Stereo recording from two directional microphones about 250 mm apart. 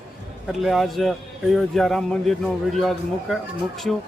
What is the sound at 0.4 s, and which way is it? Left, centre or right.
Speech, centre.